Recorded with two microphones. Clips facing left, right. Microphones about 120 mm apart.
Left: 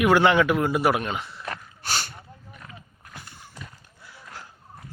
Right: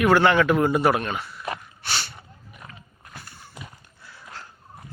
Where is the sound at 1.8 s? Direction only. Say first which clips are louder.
Left 4 dB; 45° left (ahead or behind).